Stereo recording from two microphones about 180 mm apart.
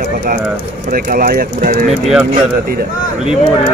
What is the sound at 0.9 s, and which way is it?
Speech, 55° right (ahead or behind).